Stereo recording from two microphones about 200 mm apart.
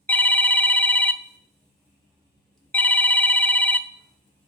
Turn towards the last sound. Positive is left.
turn(degrees=10)  # may be behind; listen again after turning